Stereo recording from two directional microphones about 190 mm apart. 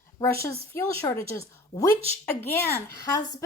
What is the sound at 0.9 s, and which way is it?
A woman's voice, 15° left (ahead or behind).